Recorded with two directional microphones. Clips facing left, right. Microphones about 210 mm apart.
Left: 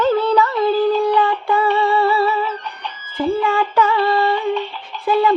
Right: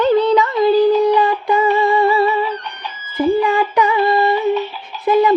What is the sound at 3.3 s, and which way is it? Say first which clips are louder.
Female singing: right 2 dB; 20° right (ahead or behind).